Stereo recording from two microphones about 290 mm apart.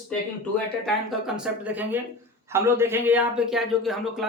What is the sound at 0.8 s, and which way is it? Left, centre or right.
Speech, centre.